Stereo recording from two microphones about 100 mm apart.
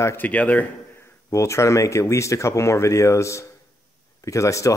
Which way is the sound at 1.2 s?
30° left (ahead or behind).